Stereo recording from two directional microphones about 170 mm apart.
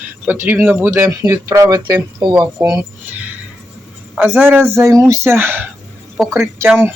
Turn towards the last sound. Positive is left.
turn(degrees=-10)  # may be behind; listen again after turning